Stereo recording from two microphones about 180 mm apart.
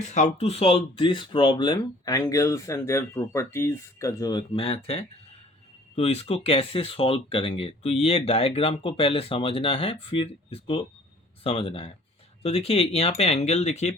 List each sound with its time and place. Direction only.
0.1 s speech: 35° left (ahead or behind)